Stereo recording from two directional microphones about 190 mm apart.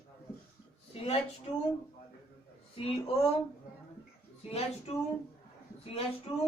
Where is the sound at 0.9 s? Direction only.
30° left (ahead or behind).